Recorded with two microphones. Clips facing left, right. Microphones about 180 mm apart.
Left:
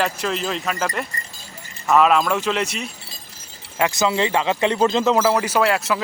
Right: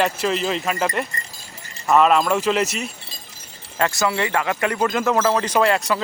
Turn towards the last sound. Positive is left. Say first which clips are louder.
# right 1 dB
turn(degrees=5)  # may be behind; listen again after turning